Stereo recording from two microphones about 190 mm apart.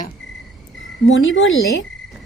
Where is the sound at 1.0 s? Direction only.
90° left.